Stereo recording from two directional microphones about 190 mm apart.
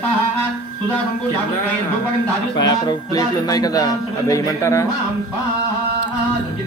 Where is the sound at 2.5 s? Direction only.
20° left (ahead or behind).